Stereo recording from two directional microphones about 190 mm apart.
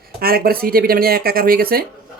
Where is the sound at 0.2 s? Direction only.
50° right (ahead or behind).